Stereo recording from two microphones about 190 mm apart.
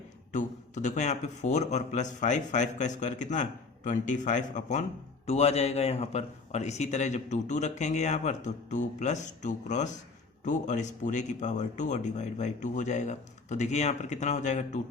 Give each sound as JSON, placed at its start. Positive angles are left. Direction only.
{"t": 0.3, "sound": "a man's voice", "side_deg": 40}